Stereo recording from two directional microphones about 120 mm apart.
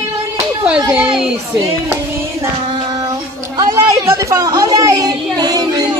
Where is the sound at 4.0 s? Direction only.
25° right (ahead or behind).